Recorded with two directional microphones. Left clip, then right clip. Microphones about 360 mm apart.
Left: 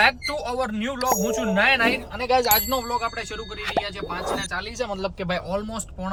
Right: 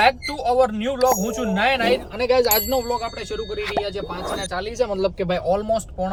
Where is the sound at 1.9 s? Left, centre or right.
Left.